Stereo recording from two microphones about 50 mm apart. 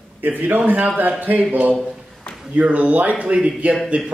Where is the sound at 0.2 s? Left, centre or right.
Right.